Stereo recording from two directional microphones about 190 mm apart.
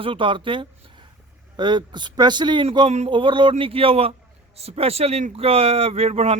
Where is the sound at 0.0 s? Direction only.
25° right (ahead or behind).